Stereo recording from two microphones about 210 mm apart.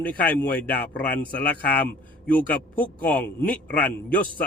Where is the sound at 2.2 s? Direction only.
5° left (ahead or behind).